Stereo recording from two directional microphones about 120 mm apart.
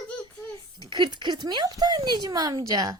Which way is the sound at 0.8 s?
35° right (ahead or behind).